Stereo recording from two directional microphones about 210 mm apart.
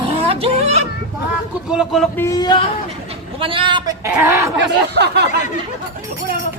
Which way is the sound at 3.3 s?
25° right (ahead or behind).